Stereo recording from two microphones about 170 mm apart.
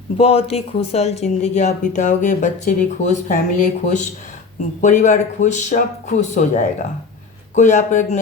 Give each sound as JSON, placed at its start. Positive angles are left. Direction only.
{"t": 0.2, "sound": "speech", "side_deg": 35}